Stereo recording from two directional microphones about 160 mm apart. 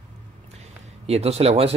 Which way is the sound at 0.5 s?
40° right (ahead or behind).